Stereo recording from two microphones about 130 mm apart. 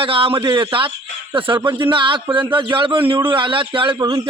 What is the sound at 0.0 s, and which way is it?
A man's voice, 45° right (ahead or behind).